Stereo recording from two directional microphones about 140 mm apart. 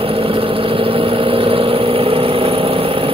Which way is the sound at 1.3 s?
40° right (ahead or behind).